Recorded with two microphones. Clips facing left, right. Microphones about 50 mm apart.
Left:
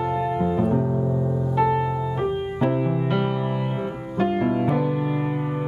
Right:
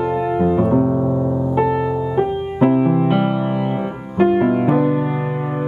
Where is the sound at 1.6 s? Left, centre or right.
Centre; by 4.6 s right.